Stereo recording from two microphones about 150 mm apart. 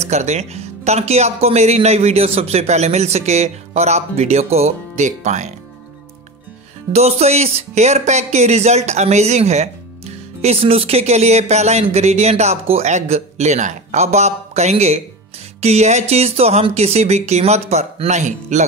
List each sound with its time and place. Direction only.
0.0 s speech: 50° right (ahead or behind)
6.9 s speech: 45° right (ahead or behind)